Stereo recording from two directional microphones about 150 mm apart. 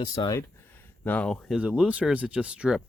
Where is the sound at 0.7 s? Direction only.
10° left (ahead or behind).